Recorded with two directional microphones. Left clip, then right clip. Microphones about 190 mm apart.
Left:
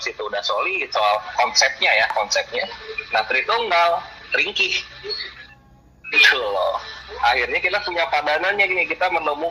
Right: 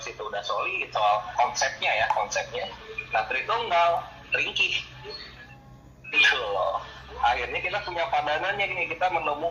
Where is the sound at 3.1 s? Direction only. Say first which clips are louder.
Left 6 dB; 45° left (ahead or behind).